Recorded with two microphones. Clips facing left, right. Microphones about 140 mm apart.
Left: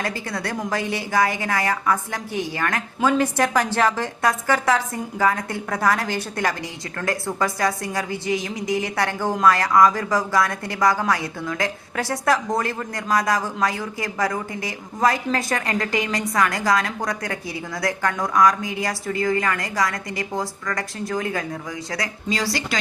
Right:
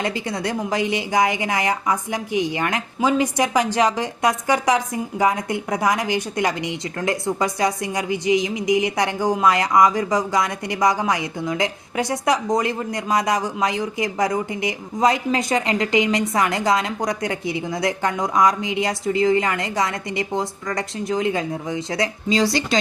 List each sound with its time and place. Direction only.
0.0 s a woman's voice: 20° right (ahead or behind)